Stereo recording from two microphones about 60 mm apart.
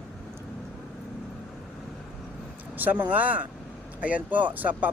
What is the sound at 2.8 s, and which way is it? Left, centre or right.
Speech, right.